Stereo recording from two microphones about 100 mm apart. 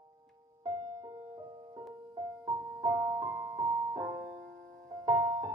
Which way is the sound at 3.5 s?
40° right (ahead or behind).